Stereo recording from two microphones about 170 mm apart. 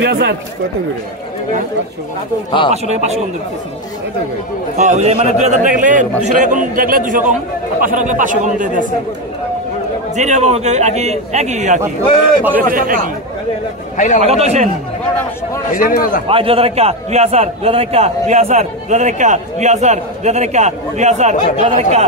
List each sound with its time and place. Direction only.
0.0 s speech: 85° right
2.7 s a man's voice: 40° right (ahead or behind)
4.7 s a man's voice: 45° right (ahead or behind)
10.1 s a man's voice: 40° right (ahead or behind)
12.6 s speech: 55° right (ahead or behind)
13.9 s a man's voice: 45° left (ahead or behind)
14.2 s a man's voice: 40° right (ahead or behind)
15.7 s a man's voice: 55° left (ahead or behind)
16.3 s a man's voice: 35° right (ahead or behind)